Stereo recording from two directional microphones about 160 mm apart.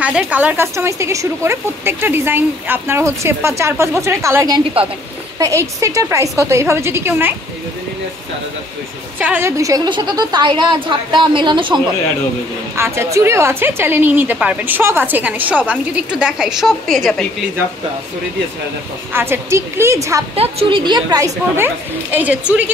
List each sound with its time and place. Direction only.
0.0 s a woman's voice: 5° right (ahead or behind)
9.2 s a woman's voice: 10° right (ahead or behind)
9.6 s a woman's voice: 20° right (ahead or behind)
12.7 s a woman's voice: 15° right (ahead or behind); by 17.3 s centre (ahead or behind)
19.1 s a woman's voice: 15° right (ahead or behind)
20.3 s a woman's voice: 35° right (ahead or behind)
22.1 s a woman's voice: 10° right (ahead or behind)